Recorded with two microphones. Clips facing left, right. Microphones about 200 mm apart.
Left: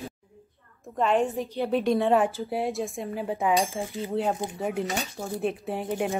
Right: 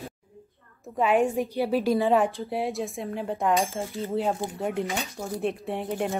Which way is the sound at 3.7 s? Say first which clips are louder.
Even; 15° left (ahead or behind).